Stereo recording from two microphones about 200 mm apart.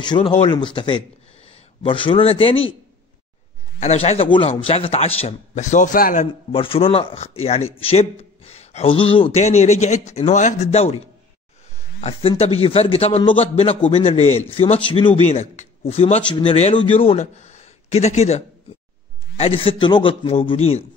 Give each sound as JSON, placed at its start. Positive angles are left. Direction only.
{"t": 0.0, "sound": "a man's voice", "side_deg": 20}
{"t": 3.8, "sound": "speech", "side_deg": 35}
{"t": 6.5, "sound": "a man's voice", "side_deg": 25}
{"t": 12.0, "sound": "a man's voice", "side_deg": 30}